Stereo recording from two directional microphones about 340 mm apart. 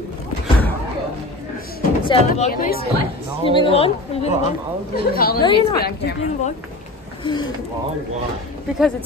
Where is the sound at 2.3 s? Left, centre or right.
Left.